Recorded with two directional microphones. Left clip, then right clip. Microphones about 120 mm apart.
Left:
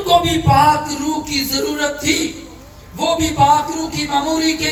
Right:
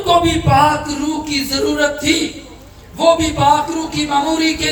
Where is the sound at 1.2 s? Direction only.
20° right (ahead or behind).